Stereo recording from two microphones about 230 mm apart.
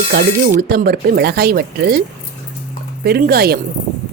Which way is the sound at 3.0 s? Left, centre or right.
Right.